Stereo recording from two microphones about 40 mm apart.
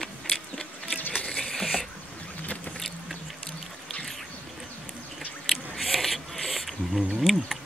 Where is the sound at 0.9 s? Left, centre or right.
Left.